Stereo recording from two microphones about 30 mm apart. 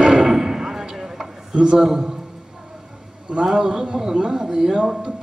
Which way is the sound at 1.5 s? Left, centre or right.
Right.